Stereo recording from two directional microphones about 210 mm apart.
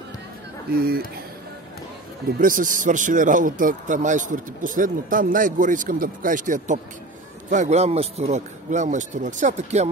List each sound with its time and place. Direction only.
0.7 s speech: 45° right (ahead or behind)
2.3 s a man's voice: 40° right (ahead or behind)